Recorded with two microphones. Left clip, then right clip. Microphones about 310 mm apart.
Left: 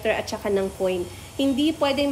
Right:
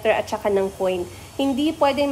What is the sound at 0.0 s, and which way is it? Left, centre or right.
A woman's voice, centre.